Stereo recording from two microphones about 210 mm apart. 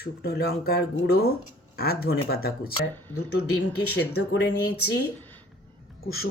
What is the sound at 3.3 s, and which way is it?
Speech, 90° left.